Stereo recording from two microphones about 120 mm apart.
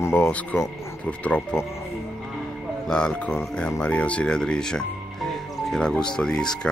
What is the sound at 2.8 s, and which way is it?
Speech, 5° left (ahead or behind).